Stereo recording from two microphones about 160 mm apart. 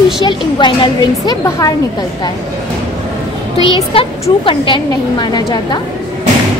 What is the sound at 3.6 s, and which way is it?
Speech, 25° right (ahead or behind).